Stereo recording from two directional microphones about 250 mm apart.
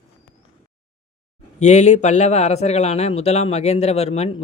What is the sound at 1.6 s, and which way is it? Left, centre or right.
Speech, left.